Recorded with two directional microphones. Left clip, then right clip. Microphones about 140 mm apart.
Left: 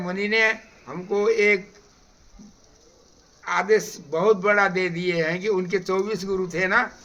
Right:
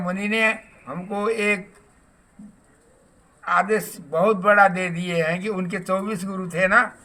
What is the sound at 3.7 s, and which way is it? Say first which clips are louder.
A man's voice: left 3 dB; 20° left (ahead or behind).